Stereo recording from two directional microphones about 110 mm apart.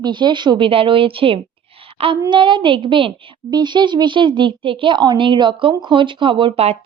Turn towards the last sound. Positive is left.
turn(degrees=-70)  # may be behind; listen again after turning